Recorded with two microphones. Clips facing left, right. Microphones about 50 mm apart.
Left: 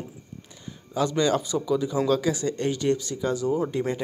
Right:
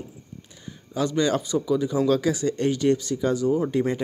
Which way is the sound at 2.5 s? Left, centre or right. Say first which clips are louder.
Right 3 dB; centre.